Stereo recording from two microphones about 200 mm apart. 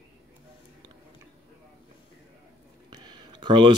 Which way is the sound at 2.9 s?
20° right (ahead or behind).